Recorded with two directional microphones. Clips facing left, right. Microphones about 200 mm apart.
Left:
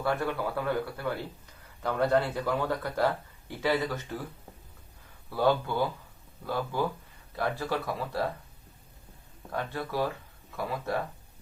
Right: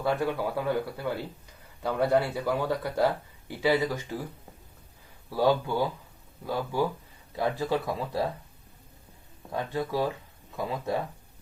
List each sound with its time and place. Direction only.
0.0 s speech: 15° right (ahead or behind)
5.3 s speech: 10° right (ahead or behind)
9.5 s speech: 15° right (ahead or behind)